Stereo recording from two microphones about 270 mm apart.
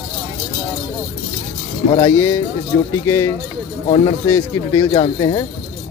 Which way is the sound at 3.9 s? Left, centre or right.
Centre.